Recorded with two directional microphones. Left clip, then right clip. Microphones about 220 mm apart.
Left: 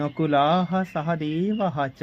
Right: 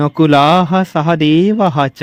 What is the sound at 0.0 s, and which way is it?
Speech, 45° right (ahead or behind).